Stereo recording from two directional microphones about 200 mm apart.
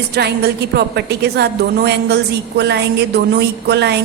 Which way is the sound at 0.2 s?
55° right (ahead or behind).